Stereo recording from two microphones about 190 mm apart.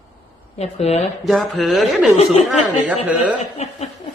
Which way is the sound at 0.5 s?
35° left (ahead or behind).